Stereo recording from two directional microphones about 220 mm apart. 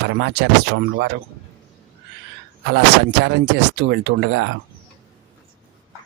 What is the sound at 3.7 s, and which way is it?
Speech, 50° right (ahead or behind).